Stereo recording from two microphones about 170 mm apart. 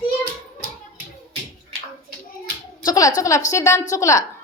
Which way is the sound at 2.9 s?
20° left (ahead or behind).